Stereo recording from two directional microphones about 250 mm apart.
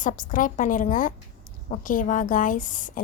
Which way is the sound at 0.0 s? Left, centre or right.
Left.